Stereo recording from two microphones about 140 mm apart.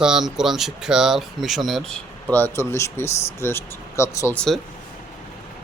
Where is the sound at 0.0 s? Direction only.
5° right (ahead or behind).